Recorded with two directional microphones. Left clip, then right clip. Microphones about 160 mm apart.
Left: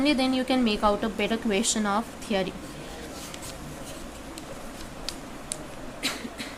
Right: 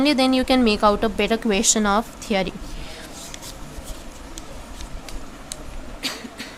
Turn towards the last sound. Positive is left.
turn(degrees=-25)  # may be behind; listen again after turning